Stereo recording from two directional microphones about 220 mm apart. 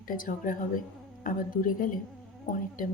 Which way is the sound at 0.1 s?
40° left (ahead or behind).